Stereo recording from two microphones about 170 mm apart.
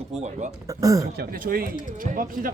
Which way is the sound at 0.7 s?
20° right (ahead or behind).